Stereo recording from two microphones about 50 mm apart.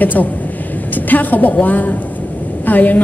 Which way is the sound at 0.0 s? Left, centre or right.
Left.